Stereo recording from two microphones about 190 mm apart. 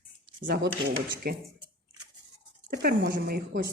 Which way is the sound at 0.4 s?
55° right (ahead or behind).